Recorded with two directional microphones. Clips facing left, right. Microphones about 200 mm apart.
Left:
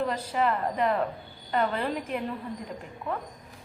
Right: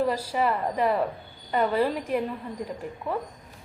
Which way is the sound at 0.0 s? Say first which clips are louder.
Right 2 dB; 5° right (ahead or behind).